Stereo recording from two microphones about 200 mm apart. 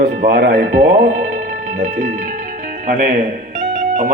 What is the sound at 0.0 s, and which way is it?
Music, 50° right (ahead or behind).